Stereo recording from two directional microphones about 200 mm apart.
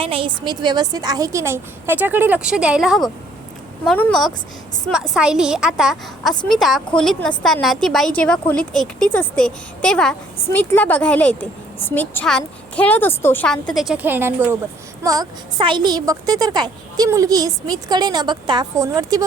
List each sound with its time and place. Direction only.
0.0 s a woman's voice: 25° right (ahead or behind)